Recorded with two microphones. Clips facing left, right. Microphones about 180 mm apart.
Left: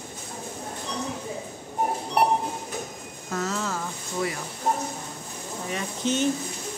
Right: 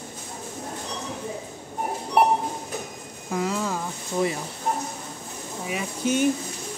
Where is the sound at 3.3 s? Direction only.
10° right (ahead or behind).